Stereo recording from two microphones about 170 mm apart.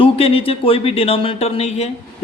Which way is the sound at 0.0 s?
35° left (ahead or behind).